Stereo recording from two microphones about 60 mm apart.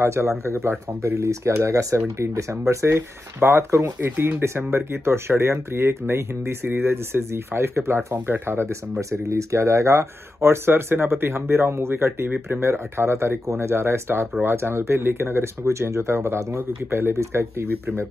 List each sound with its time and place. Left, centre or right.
0.0 s speech: right
1.2 s speech: right
2.0 s speech: right
3.3 s speech: right
9.1 s speech: right
16.5 s speech: right
17.1 s speech: right